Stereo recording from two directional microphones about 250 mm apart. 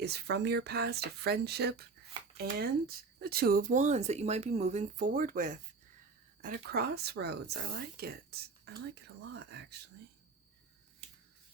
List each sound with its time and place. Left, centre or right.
0.0 s speech: right